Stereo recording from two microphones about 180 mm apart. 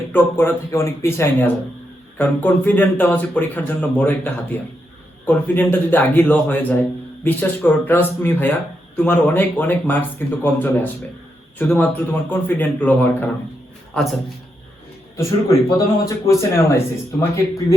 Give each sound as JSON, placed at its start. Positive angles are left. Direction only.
{"t": 0.3, "sound": "a man's voice", "side_deg": 15}
{"t": 15.1, "sound": "a man's voice", "side_deg": 15}